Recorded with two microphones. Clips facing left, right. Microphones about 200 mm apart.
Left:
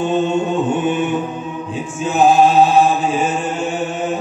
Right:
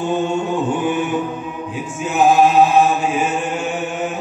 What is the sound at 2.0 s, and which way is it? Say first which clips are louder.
Chant: left 1 dB; 30° left (ahead or behind).